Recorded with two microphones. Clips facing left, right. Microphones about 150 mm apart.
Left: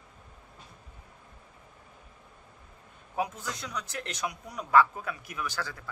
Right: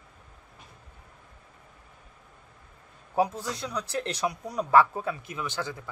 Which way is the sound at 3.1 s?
35° right (ahead or behind).